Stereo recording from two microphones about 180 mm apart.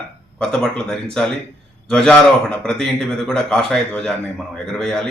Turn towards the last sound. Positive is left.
turn(degrees=5)  # may be behind; listen again after turning